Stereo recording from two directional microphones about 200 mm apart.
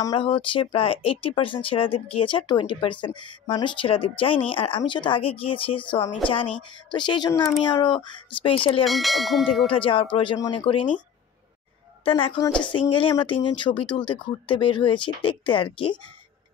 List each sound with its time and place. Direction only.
0.0 s speech: 25° left (ahead or behind)
8.8 s bell: centre (ahead or behind)
9.7 s speech: 25° left (ahead or behind)
12.0 s a woman's voice: 25° left (ahead or behind)